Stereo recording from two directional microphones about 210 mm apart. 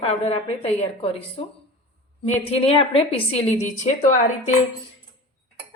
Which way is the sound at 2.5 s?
25° left (ahead or behind).